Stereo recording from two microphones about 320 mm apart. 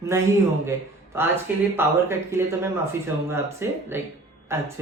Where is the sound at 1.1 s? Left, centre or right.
Centre.